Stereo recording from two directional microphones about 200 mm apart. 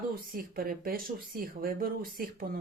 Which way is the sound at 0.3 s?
45° right (ahead or behind).